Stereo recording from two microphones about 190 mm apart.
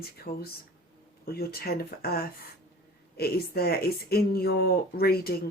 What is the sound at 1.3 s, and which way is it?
Speech, 55° left (ahead or behind).